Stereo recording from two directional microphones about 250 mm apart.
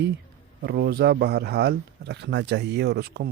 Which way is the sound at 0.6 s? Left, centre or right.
Right.